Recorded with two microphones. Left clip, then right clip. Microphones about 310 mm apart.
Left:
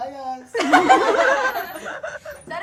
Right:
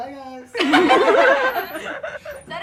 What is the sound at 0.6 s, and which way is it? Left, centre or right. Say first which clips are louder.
Speech: even; left.